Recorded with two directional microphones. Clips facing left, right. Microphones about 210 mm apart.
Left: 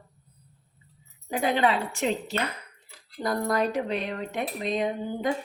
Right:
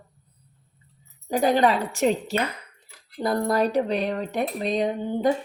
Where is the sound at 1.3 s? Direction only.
40° right (ahead or behind).